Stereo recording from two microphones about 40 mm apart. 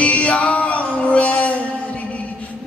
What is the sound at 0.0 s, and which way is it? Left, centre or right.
Music, left.